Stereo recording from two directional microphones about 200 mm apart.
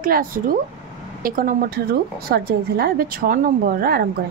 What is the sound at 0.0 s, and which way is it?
A woman's voice, 45° right (ahead or behind).